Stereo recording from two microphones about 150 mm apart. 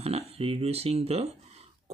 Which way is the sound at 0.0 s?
45° right (ahead or behind).